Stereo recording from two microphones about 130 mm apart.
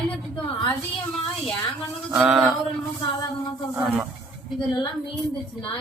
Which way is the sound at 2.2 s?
5° right (ahead or behind).